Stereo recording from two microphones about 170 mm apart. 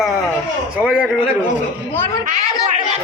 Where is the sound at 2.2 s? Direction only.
45° right (ahead or behind).